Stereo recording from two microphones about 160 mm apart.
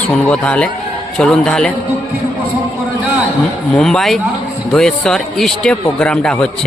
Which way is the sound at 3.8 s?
5° left (ahead or behind).